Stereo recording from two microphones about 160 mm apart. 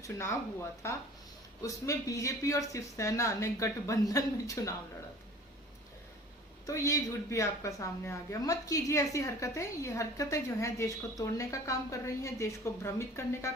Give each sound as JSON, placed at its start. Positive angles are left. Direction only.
{"t": 0.0, "sound": "a woman's voice", "side_deg": 15}
{"t": 6.7, "sound": "a woman's voice", "side_deg": 20}